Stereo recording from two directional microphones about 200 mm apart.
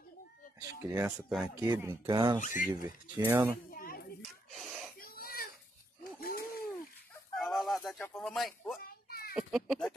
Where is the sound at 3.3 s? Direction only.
10° right (ahead or behind).